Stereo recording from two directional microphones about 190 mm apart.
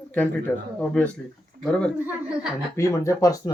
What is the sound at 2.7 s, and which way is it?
Speech, 15° left (ahead or behind).